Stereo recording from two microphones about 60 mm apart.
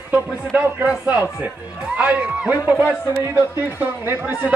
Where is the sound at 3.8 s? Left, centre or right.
Right.